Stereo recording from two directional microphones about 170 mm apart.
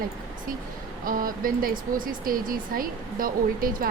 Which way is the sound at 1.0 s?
55° right (ahead or behind).